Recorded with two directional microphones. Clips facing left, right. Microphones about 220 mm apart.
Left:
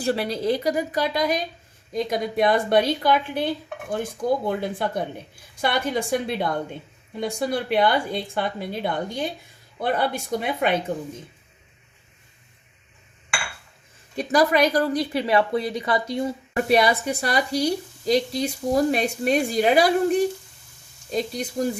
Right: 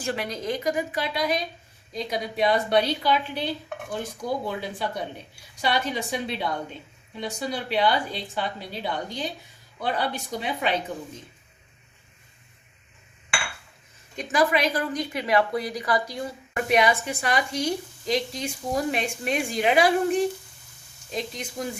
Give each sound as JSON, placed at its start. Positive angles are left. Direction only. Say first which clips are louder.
{"t": 0.0, "sound": "a woman's voice", "louder": "left 6 dB", "side_deg": 35}
{"t": 14.2, "sound": "a woman's voice", "louder": "left 4 dB", "side_deg": 40}